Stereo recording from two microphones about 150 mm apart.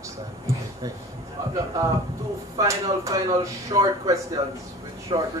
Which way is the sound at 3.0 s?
25° right (ahead or behind).